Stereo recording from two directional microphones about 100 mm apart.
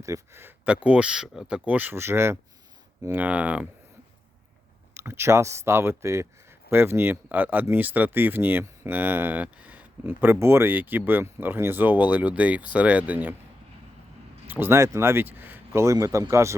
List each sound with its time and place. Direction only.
0.0 s speech: 30° right (ahead or behind)
0.6 s speech: 15° right (ahead or behind)
4.9 s speech: 25° right (ahead or behind)
14.4 s speech: 20° right (ahead or behind)